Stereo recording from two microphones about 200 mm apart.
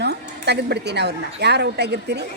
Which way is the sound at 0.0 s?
55° right (ahead or behind).